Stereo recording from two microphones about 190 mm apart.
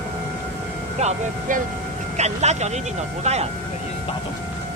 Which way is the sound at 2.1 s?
35° right (ahead or behind).